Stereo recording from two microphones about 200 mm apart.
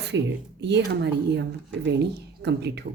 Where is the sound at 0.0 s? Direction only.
60° right (ahead or behind).